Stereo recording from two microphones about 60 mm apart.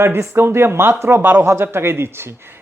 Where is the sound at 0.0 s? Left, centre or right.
Right.